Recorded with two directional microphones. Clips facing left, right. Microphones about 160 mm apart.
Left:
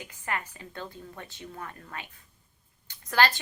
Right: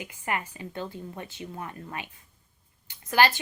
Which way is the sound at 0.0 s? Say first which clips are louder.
Right 3 dB; 15° right (ahead or behind).